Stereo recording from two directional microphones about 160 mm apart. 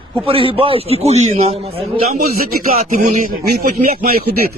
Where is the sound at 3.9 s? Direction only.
70° right (ahead or behind).